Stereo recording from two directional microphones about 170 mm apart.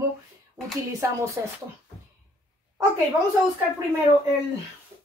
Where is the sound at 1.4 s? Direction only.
15° right (ahead or behind).